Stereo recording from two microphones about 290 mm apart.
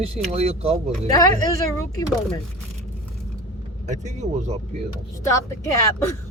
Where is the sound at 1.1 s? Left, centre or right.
Centre.